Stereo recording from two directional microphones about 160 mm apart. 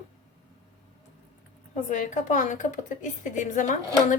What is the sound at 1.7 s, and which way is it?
A woman's voice, 50° left (ahead or behind).